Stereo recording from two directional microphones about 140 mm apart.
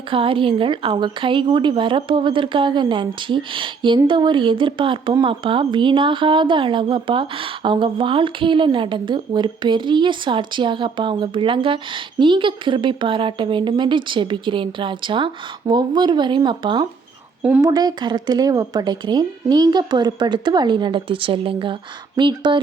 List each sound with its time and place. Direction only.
0.1 s speech: 40° right (ahead or behind)